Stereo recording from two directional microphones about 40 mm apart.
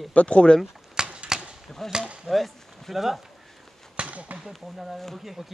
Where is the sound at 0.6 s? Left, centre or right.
Centre.